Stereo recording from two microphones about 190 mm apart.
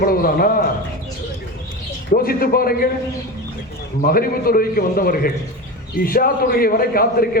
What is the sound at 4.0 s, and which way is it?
A man's voice, 50° left (ahead or behind).